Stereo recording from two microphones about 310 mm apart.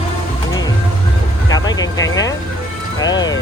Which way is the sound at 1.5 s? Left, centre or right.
Centre.